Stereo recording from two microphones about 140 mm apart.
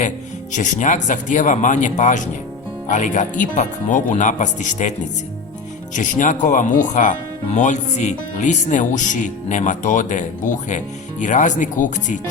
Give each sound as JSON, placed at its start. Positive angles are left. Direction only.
{"t": 0.5, "sound": "speech", "side_deg": 65}